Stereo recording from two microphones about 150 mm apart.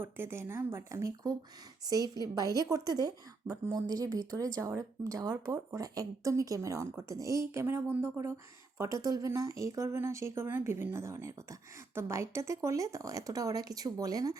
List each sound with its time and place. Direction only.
0.0 s speech: 15° right (ahead or behind)